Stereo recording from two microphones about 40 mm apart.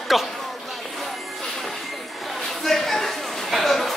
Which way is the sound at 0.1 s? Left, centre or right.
Centre.